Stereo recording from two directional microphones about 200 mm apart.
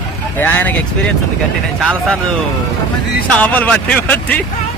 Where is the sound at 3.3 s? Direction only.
5° left (ahead or behind).